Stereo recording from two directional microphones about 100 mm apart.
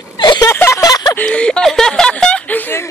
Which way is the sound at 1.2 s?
10° left (ahead or behind).